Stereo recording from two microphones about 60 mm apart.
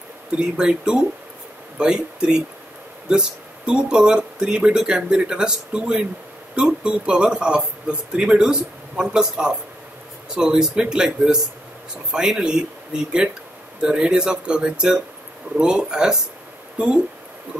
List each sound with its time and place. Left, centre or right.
0.4 s speech: centre